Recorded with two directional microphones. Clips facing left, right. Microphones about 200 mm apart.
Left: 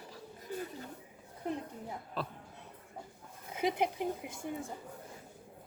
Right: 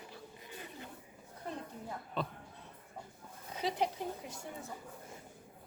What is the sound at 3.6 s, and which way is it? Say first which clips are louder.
Speech: left 3 dB; 15° left (ahead or behind).